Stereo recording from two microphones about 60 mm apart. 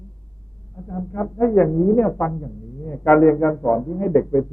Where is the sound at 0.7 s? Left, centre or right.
Left.